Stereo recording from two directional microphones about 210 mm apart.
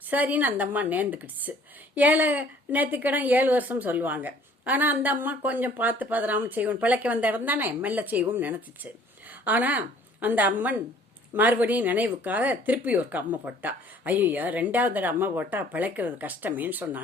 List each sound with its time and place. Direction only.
0.1 s a woman's voice: 10° right (ahead or behind)